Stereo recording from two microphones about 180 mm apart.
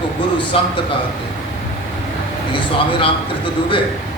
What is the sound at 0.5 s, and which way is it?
Speech, 30° left (ahead or behind).